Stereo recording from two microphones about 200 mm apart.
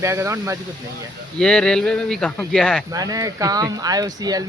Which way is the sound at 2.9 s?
20° right (ahead or behind).